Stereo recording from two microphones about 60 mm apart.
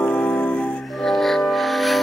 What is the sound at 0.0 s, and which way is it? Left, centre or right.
Music, left.